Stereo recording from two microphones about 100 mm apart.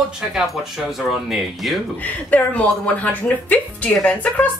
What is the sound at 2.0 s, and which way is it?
Speech, 15° left (ahead or behind).